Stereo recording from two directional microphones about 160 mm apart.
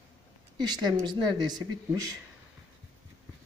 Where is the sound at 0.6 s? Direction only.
25° right (ahead or behind).